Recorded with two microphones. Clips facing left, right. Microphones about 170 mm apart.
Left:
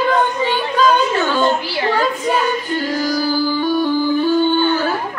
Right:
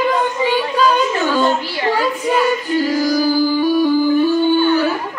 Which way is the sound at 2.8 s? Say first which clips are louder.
Right 5 dB; 10° right (ahead or behind).